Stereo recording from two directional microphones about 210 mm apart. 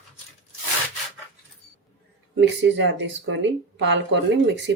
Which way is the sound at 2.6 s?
60° right (ahead or behind).